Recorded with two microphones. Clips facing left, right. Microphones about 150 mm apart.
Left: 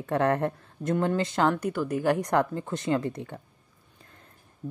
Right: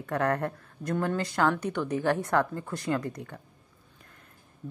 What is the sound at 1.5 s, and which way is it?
Speech, 5° left (ahead or behind).